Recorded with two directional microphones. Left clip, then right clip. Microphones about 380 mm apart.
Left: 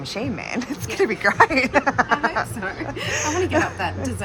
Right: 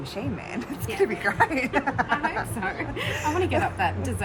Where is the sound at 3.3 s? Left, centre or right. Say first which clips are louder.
Left 2 dB; centre.